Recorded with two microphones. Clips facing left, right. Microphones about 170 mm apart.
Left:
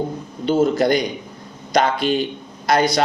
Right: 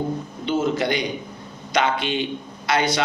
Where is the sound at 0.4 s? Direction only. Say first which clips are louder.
Left 6 dB; 40° left (ahead or behind).